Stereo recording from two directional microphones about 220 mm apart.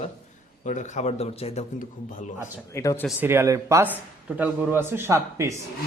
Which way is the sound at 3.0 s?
10° right (ahead or behind).